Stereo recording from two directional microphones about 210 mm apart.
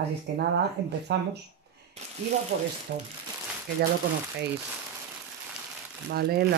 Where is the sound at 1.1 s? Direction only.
55° right (ahead or behind).